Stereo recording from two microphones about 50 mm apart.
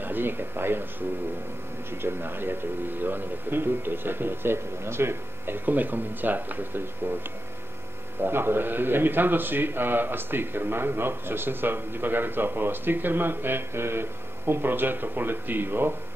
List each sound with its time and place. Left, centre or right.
0.0 s a man's voice: right
2.0 s a man's voice: right
5.7 s speech: right
8.2 s a man's voice: right